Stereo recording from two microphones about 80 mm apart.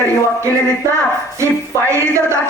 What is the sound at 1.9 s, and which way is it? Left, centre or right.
Speech, right.